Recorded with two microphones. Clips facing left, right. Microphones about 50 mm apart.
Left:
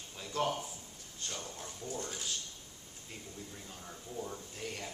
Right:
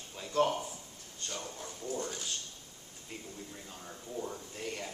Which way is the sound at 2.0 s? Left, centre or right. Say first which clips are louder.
Right 2 dB; centre.